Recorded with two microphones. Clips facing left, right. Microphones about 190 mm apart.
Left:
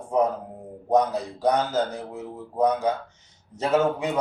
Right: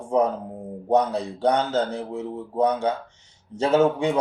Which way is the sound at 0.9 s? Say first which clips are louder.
Right 1 dB; 30° right (ahead or behind).